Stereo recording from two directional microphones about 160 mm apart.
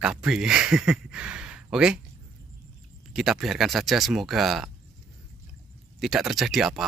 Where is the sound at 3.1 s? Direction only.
Centre (ahead or behind).